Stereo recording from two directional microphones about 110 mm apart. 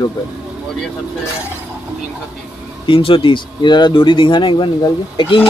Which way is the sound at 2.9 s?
55° left (ahead or behind).